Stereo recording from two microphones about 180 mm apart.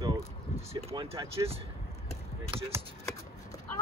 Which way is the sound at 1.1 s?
15° right (ahead or behind).